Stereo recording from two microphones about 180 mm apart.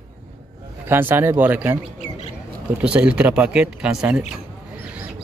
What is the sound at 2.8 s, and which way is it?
Speech, 5° right (ahead or behind).